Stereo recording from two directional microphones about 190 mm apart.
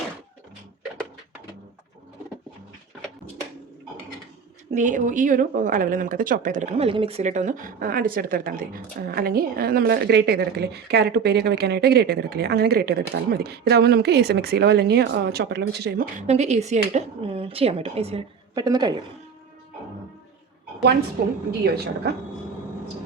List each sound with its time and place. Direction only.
4.7 s a woman's voice: 40° right (ahead or behind)
16.2 s speech: 35° right (ahead or behind)
21.2 s a woman's voice: 55° right (ahead or behind)